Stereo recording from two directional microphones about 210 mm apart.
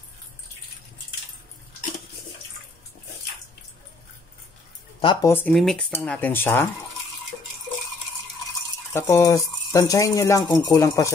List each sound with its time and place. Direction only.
5.0 s speech: 20° left (ahead or behind)
5.3 s speech: 5° left (ahead or behind)
8.9 s speech: 15° left (ahead or behind)